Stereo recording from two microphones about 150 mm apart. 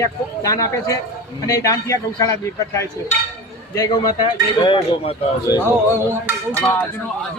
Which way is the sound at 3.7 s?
25° left (ahead or behind).